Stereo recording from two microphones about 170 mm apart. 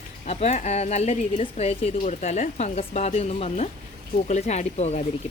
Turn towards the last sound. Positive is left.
turn(degrees=40)  # may be behind; listen again after turning